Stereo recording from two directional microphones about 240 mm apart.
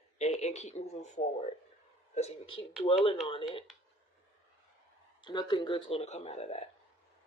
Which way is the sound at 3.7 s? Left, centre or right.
Centre.